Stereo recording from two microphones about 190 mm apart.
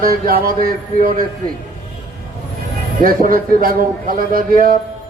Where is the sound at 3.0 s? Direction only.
50° right (ahead or behind).